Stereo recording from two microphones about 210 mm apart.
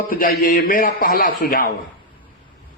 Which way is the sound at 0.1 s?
40° left (ahead or behind).